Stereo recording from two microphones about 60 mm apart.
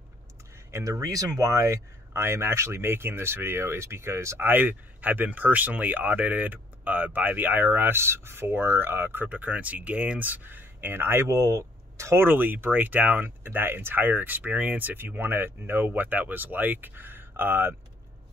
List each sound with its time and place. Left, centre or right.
0.7 s speech: right
1.0 s speech: right
4.4 s speech: right